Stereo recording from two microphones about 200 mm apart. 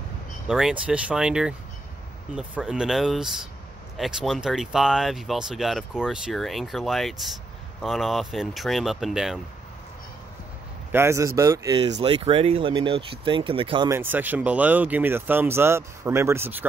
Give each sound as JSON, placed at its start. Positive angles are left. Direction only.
{"t": 0.5, "sound": "speech", "side_deg": -5}
{"t": 10.9, "sound": "speech", "side_deg": -10}
{"t": 11.8, "sound": "speech", "side_deg": -30}
{"t": 13.8, "sound": "speech", "side_deg": -10}